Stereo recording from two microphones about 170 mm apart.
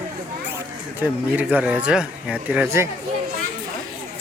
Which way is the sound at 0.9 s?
10° right (ahead or behind).